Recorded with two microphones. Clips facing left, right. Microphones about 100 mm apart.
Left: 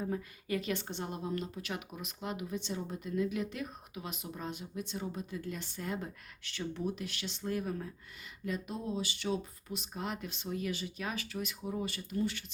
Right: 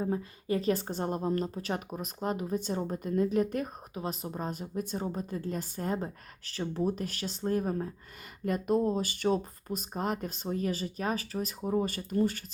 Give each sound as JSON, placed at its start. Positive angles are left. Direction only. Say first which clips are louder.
{"t": 0.0, "sound": "a woman's voice", "louder": "right 5 dB", "side_deg": -30}
{"t": 8.4, "sound": "speech", "louder": "right 10 dB", "side_deg": -50}